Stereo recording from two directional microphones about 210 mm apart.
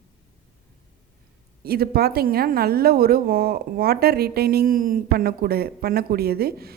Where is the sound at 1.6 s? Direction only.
45° right (ahead or behind).